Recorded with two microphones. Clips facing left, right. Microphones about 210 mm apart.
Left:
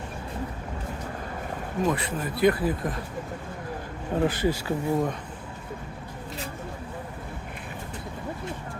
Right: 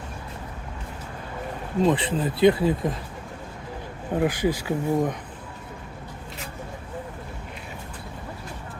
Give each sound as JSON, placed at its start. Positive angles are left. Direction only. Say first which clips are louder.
{"t": 1.8, "sound": "speech", "louder": "right 5 dB", "side_deg": -30}
{"t": 4.1, "sound": "speech", "louder": "right 1 dB", "side_deg": -15}